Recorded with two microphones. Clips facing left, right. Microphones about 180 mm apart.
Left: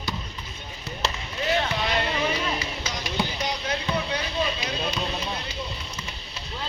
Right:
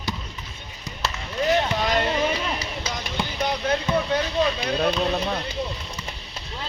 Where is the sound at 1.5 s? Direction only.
45° right (ahead or behind).